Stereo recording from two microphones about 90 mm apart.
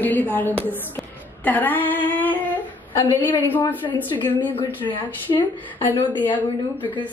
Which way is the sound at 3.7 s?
20° left (ahead or behind).